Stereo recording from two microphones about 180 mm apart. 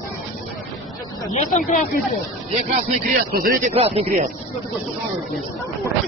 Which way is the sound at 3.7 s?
35° right (ahead or behind).